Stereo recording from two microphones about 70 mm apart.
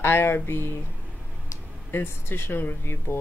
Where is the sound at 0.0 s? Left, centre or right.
Left.